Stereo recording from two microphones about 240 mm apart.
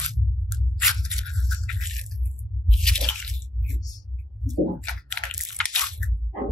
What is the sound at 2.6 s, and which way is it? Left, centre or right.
Squish, centre.